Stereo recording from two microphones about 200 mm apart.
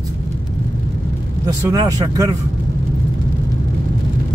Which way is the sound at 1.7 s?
15° right (ahead or behind).